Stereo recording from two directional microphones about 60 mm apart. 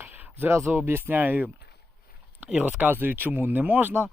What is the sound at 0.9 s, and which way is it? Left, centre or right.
Speech, right.